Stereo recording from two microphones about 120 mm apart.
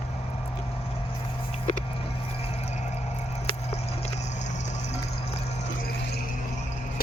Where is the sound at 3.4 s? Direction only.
65° left (ahead or behind).